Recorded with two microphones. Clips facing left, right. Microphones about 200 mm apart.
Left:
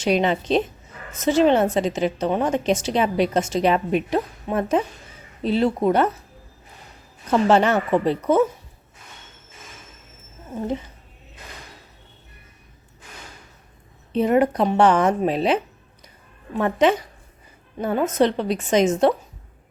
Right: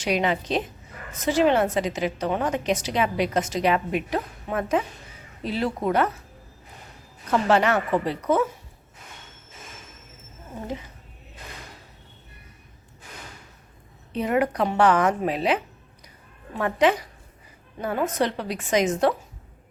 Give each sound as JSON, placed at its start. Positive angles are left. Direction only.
{"t": 0.0, "sound": "a woman's voice", "side_deg": 25}
{"t": 7.3, "sound": "a woman's voice", "side_deg": 25}
{"t": 14.1, "sound": "a woman's voice", "side_deg": 30}